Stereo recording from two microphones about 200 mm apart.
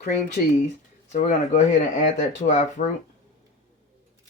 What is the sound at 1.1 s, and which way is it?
Speech, 35° left (ahead or behind).